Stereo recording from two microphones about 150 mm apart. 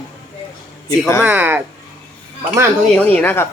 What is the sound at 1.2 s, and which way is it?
Speech, 10° right (ahead or behind).